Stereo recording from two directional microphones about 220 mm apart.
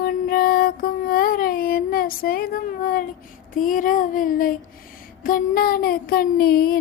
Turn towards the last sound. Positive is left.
turn(degrees=45)  # may be behind; listen again after turning